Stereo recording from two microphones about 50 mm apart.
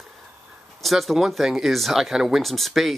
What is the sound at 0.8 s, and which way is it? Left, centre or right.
Speech, centre.